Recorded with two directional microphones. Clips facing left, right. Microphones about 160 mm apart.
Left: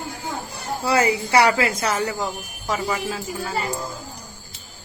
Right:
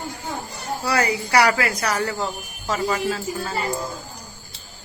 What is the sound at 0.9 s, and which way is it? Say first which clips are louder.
Speech: left 3 dB; 20° left (ahead or behind).